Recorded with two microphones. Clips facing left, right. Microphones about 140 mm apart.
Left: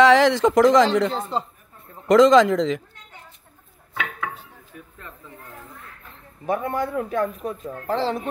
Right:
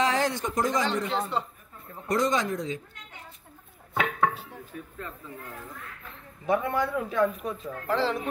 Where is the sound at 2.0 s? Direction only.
90° left.